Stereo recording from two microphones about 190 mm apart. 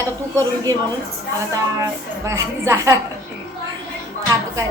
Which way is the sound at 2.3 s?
15° right (ahead or behind).